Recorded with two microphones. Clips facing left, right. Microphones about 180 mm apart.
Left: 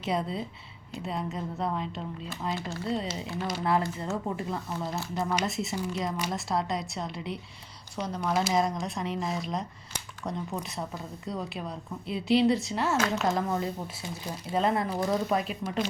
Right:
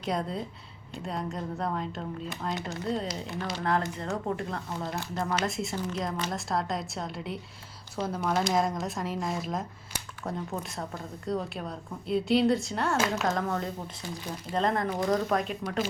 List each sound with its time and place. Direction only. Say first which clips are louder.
0.0 s speech: left 1 dB; 5° left (ahead or behind)
2.6 s speech: even; 20° right (ahead or behind)
3.2 s speech: left 1 dB; 5° left (ahead or behind)